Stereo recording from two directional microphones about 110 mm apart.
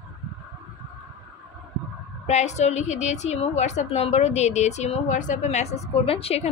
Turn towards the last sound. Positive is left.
turn(degrees=65)  # may be behind; listen again after turning